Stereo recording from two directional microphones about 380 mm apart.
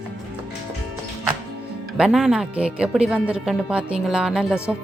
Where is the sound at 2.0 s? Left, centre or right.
Centre.